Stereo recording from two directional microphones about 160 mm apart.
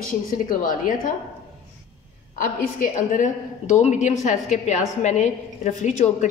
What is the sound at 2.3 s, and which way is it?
A woman's voice, 55° left (ahead or behind).